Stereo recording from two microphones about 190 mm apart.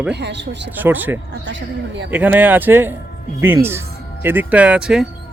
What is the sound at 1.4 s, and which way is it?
Speech, 70° right (ahead or behind).